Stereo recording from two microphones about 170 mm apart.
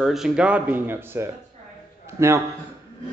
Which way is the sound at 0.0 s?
Centre (ahead or behind).